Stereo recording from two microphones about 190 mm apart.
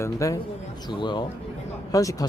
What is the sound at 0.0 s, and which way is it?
Speech, 15° left (ahead or behind).